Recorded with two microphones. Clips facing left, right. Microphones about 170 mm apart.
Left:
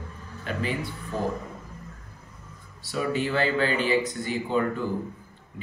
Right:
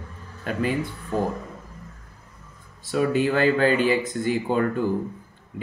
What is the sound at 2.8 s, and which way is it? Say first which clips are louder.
A man's voice: right 5 dB; 50° right (ahead or behind).